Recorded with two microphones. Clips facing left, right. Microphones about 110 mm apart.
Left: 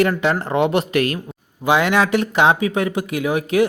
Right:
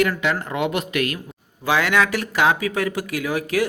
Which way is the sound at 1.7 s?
20° left (ahead or behind).